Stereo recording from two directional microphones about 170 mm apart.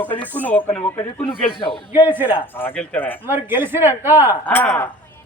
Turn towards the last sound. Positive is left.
turn(degrees=10)  # may be behind; listen again after turning